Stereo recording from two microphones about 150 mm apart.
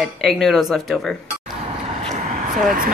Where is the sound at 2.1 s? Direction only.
60° right (ahead or behind).